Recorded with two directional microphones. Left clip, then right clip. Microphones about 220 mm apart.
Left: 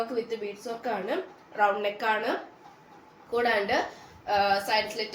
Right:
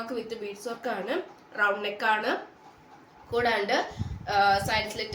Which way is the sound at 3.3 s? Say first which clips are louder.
Even; 15° right (ahead or behind).